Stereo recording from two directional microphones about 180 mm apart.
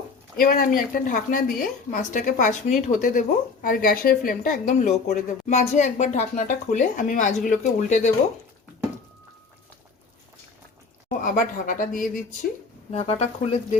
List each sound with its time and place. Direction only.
0.3 s a woman's voice: 55° left (ahead or behind)
11.2 s a woman's voice: 50° left (ahead or behind)
12.9 s speech: 35° left (ahead or behind)